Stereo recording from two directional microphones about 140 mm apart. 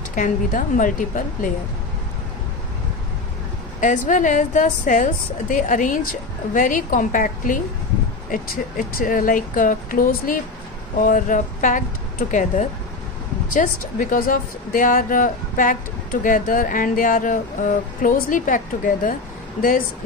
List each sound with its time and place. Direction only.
0.1 s speech: 70° left (ahead or behind)
3.8 s a woman's voice: 65° left (ahead or behind)
13.6 s speech: 85° left